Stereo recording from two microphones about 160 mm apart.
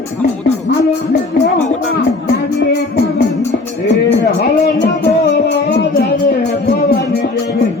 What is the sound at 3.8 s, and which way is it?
Music, 90° left.